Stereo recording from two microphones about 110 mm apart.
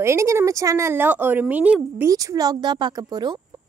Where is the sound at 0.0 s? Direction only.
25° right (ahead or behind).